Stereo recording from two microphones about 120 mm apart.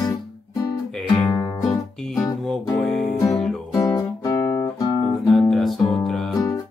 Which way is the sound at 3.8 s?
30° left (ahead or behind).